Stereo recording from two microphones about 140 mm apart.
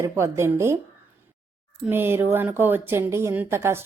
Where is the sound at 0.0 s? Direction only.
20° right (ahead or behind).